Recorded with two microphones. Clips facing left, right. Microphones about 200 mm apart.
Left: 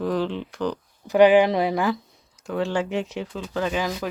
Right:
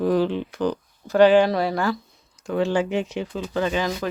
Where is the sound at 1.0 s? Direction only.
15° left (ahead or behind).